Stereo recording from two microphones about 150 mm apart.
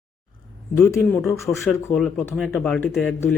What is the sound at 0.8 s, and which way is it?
Speech, 15° left (ahead or behind).